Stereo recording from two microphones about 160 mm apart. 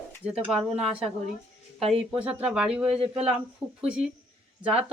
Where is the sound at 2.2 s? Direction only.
5° right (ahead or behind).